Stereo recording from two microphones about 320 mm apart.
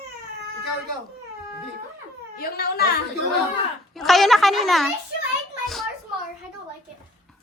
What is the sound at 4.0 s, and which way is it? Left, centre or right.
Speech, centre.